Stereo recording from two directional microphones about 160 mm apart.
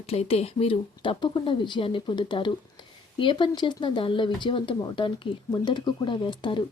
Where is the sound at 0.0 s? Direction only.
40° left (ahead or behind).